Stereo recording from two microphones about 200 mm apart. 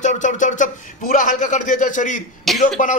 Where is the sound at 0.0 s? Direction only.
40° left (ahead or behind).